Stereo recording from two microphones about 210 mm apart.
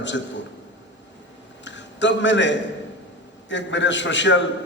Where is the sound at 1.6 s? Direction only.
60° left (ahead or behind).